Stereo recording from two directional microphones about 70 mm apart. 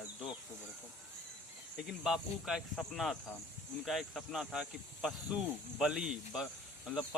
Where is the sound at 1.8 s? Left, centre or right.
Centre.